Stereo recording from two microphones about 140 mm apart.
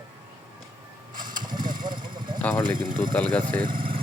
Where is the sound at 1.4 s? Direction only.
30° right (ahead or behind).